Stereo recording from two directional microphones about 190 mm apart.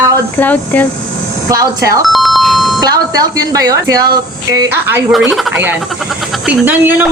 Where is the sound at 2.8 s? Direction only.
20° right (ahead or behind).